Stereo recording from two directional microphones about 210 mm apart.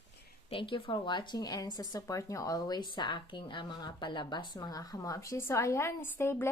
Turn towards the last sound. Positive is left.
turn(degrees=10)  # may be behind; listen again after turning